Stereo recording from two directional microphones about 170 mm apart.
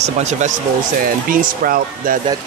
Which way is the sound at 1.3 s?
55° right (ahead or behind).